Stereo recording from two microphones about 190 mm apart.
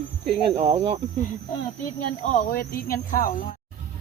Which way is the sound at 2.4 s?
50° left (ahead or behind).